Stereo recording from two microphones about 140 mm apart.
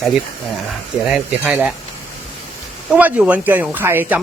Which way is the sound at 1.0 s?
10° right (ahead or behind).